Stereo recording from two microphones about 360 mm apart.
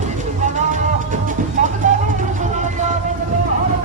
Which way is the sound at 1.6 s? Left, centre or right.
Right.